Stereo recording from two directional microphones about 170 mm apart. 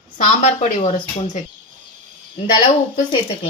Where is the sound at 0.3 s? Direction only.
45° left (ahead or behind).